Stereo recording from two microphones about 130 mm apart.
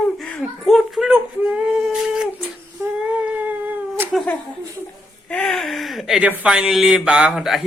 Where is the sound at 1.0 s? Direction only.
10° right (ahead or behind).